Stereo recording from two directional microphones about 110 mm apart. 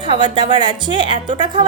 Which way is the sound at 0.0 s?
45° right (ahead or behind).